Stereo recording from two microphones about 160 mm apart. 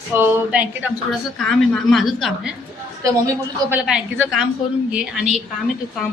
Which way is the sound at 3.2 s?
15° right (ahead or behind).